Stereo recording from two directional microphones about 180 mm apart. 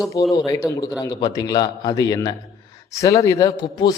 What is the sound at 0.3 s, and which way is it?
A man's voice, 20° left (ahead or behind).